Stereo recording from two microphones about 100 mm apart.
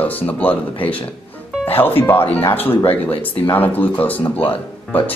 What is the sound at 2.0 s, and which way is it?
Speech, 20° left (ahead or behind).